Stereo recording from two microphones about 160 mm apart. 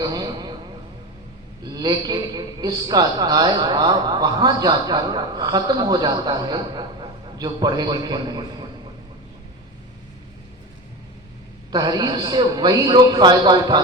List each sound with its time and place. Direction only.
0.0 s a sound: 25° right (ahead or behind)
1.6 s speech: 25° right (ahead or behind)
11.7 s speech: 25° right (ahead or behind)